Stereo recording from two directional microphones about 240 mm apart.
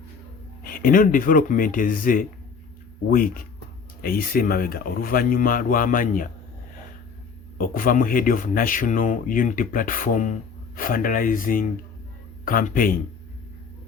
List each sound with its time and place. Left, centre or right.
0.6 s speech: left
7.6 s speech: left